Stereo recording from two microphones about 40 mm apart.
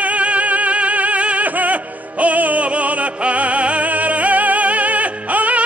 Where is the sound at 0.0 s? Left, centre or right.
Right.